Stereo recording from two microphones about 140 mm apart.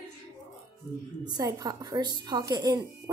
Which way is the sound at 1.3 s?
25° right (ahead or behind).